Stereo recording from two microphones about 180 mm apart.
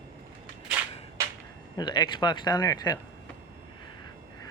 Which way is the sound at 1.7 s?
25° left (ahead or behind).